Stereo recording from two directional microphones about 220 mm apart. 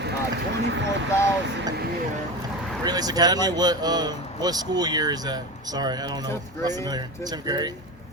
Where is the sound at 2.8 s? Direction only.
15° right (ahead or behind).